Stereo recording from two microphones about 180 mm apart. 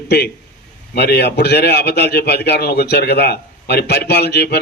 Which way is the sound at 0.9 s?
65° left (ahead or behind).